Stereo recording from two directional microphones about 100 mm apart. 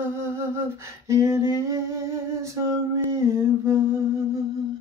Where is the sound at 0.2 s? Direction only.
25° right (ahead or behind).